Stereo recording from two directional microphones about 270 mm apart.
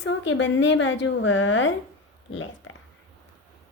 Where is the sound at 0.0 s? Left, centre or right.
Left.